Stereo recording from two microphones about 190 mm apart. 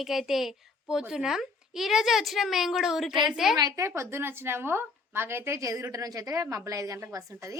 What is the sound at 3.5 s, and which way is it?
A woman's voice, 20° right (ahead or behind).